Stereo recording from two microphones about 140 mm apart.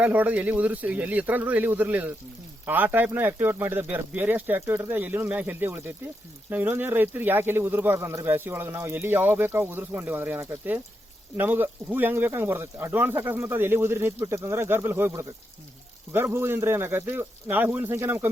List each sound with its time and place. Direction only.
0.0 s speech: 10° right (ahead or behind)